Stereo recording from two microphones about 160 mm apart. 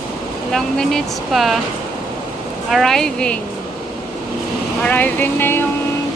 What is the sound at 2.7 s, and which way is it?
Speech, centre (ahead or behind).